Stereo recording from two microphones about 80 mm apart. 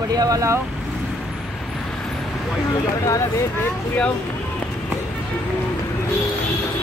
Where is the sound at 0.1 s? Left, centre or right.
Right.